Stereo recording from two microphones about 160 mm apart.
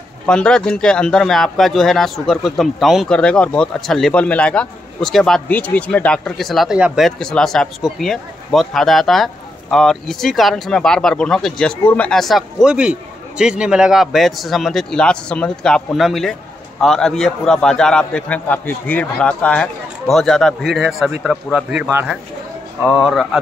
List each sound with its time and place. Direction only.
0.3 s speech: 5° left (ahead or behind)